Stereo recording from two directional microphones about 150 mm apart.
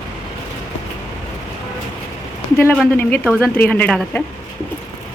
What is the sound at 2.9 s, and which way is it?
Speech, 10° left (ahead or behind).